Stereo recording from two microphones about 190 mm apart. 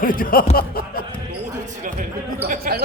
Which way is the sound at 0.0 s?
45° left (ahead or behind).